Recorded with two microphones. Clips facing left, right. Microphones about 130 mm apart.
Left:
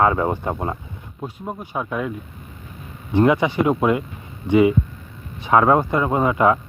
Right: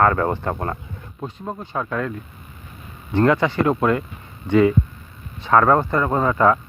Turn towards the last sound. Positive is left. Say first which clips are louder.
# even
turn(degrees=15)  # may be behind; listen again after turning